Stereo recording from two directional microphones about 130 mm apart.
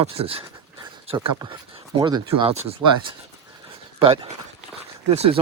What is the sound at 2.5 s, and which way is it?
Speech, 55° right (ahead or behind).